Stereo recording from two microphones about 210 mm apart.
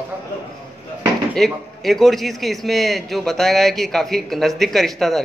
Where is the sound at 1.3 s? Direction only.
Centre (ahead or behind).